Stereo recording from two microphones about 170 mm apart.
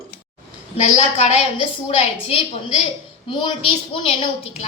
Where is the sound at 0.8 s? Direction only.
45° left (ahead or behind).